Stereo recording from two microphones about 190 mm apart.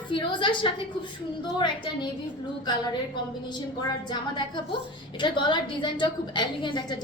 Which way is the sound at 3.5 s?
20° left (ahead or behind).